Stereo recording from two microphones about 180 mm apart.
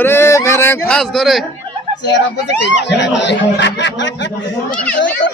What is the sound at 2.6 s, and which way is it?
Speech, 75° left (ahead or behind).